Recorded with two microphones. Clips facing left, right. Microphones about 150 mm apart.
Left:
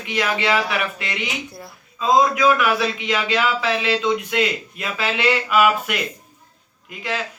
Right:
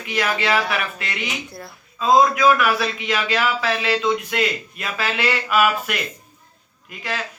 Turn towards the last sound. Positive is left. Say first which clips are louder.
# left 2 dB
turn(degrees=20)  # may be behind; listen again after turning